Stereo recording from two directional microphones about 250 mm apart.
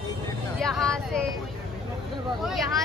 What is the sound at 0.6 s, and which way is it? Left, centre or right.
Speech, centre.